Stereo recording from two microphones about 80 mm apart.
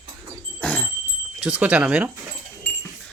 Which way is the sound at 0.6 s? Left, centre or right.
Centre.